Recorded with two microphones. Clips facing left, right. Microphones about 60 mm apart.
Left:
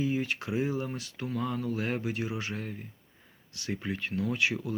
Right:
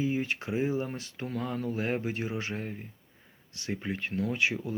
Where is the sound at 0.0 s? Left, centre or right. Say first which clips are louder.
Even; right.